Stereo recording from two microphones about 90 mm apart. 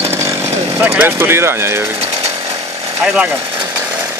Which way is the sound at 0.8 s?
25° right (ahead or behind).